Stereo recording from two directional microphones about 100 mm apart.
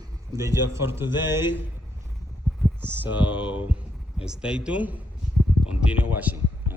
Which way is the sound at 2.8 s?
20° right (ahead or behind).